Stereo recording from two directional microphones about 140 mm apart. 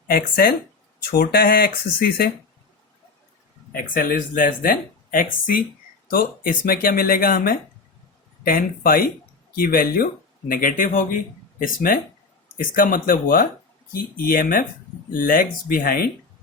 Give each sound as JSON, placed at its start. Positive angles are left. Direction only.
{"t": 0.1, "sound": "speech", "side_deg": 90}
{"t": 3.7, "sound": "speech", "side_deg": 85}
{"t": 6.1, "sound": "speech", "side_deg": 90}
{"t": 10.5, "sound": "speech", "side_deg": 75}
{"t": 11.6, "sound": "speech", "side_deg": 90}